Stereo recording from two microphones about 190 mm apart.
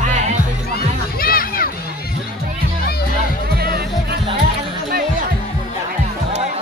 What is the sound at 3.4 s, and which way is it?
Music, 55° right (ahead or behind).